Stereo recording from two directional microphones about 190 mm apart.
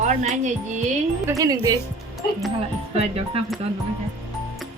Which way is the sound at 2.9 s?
35° right (ahead or behind).